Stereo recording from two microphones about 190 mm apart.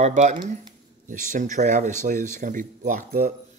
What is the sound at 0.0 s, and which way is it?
Speech, 40° right (ahead or behind).